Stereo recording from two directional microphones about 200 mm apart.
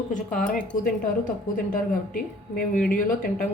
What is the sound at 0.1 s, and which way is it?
A woman's voice, 40° left (ahead or behind).